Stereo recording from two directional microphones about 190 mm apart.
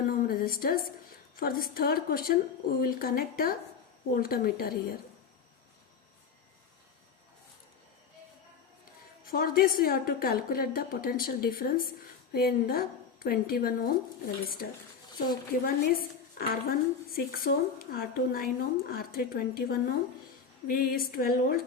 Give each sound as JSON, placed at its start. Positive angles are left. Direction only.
{"t": 0.1, "sound": "a sound", "side_deg": 50}
{"t": 1.4, "sound": "a woman's voice", "side_deg": 50}
{"t": 9.2, "sound": "a woman's voice", "side_deg": 50}
{"t": 15.6, "sound": "a woman's voice", "side_deg": 50}